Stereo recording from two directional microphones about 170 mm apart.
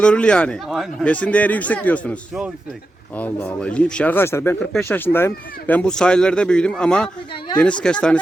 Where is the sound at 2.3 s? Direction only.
5° right (ahead or behind).